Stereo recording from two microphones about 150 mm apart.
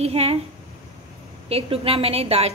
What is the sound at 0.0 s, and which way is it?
Speech, 45° right (ahead or behind).